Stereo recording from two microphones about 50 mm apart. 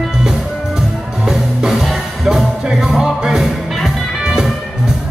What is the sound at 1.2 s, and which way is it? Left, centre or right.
Music, centre.